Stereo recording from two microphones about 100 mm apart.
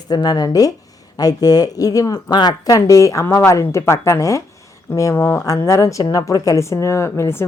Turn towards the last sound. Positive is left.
turn(degrees=25)  # may be behind; listen again after turning